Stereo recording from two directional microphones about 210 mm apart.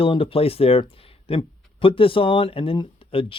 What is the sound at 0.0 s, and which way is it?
Speech, 25° left (ahead or behind).